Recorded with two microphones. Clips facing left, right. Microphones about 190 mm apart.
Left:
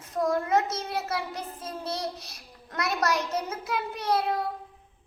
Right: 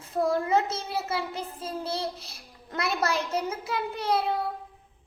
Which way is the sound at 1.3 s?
30° right (ahead or behind).